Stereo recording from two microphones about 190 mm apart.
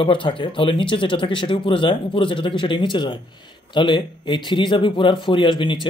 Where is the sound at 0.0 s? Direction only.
25° left (ahead or behind).